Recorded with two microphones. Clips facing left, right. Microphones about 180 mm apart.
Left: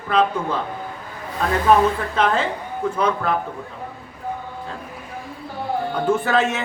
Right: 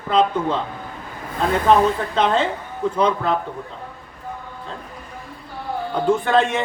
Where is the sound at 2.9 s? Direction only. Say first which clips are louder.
Right 2 dB; 25° right (ahead or behind).